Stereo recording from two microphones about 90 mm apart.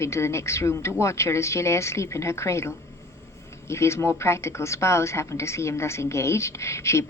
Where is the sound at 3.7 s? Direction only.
30° left (ahead or behind).